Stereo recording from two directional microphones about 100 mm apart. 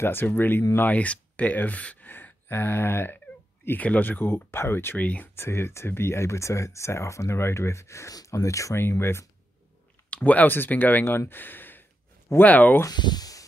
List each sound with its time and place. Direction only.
0.0 s speech: 20° left (ahead or behind)
10.0 s speech: 15° left (ahead or behind)
12.8 s speech: 45° left (ahead or behind)